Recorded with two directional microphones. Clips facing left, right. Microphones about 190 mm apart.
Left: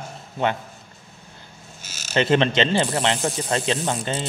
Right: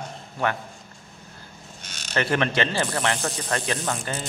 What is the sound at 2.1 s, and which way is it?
A man's voice, 20° left (ahead or behind).